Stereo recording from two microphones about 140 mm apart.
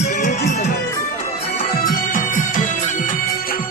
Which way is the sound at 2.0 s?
70° left (ahead or behind).